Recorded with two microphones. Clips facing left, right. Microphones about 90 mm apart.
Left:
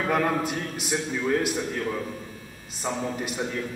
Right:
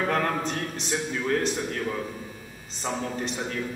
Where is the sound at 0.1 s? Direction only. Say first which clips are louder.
Left 2 dB; 10° left (ahead or behind).